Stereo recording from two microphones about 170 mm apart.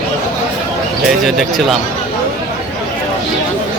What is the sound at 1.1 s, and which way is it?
Speech, centre (ahead or behind).